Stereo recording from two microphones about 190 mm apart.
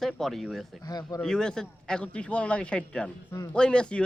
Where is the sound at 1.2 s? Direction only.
5° left (ahead or behind).